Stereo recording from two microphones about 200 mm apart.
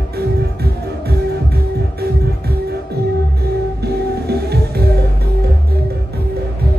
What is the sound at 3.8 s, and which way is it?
Music, 55° right (ahead or behind).